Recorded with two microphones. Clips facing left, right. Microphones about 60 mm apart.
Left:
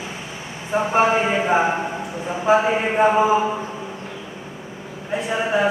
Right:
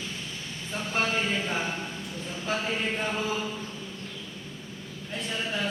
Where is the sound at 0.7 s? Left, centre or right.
Left.